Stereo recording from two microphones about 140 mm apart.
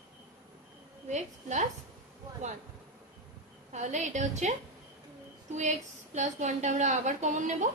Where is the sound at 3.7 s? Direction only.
60° right (ahead or behind).